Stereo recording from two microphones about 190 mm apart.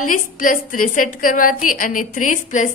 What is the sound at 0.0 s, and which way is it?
A woman's voice, 45° left (ahead or behind).